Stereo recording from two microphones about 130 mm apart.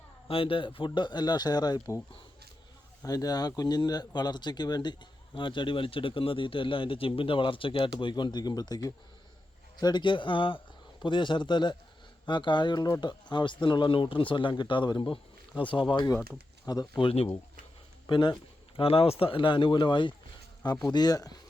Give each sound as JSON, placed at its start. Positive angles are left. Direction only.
{"t": 0.3, "sound": "speech", "side_deg": 45}
{"t": 17.0, "sound": "speech", "side_deg": 50}
{"t": 18.0, "sound": "speech", "side_deg": 35}
{"t": 18.8, "sound": "speech", "side_deg": 50}